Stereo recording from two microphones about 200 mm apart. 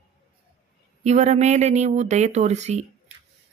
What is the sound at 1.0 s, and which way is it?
Speech, 35° right (ahead or behind).